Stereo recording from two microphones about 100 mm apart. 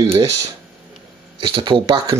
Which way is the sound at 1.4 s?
60° right (ahead or behind).